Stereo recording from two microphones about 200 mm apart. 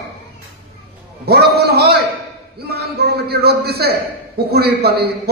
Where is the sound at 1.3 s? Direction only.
55° right (ahead or behind).